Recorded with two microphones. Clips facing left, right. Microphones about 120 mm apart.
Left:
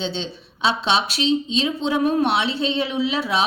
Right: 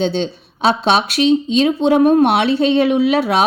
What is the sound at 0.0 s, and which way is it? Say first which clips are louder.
Speech: right 9 dB; 50° right (ahead or behind).